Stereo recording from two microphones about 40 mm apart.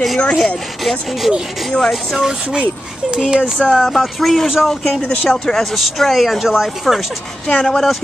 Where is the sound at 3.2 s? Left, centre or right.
Centre.